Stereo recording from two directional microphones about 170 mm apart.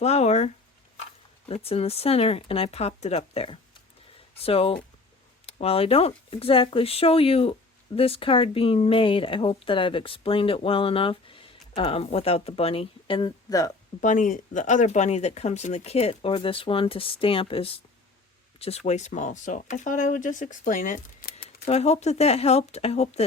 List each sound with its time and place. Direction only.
0.0 s speech: 40° left (ahead or behind); by 13.7 s 20° left (ahead or behind)
14.0 s speech: 50° left (ahead or behind)
21.7 s speech: 40° left (ahead or behind)